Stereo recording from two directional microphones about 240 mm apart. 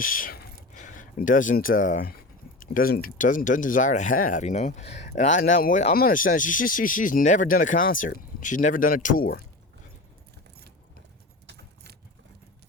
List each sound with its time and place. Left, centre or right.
0.0 s speech: left
11.4 s keys jangling: right